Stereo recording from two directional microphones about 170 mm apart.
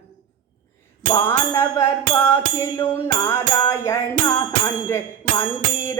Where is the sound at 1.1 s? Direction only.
15° left (ahead or behind).